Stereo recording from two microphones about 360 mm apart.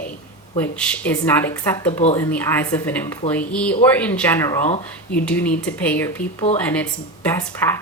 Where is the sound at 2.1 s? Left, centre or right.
Centre.